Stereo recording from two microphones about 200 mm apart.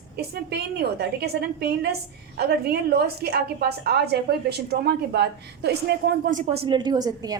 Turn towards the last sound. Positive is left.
turn(degrees=-20)  # may be behind; listen again after turning